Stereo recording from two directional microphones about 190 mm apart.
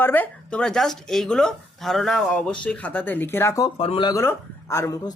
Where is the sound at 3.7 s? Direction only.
30° left (ahead or behind).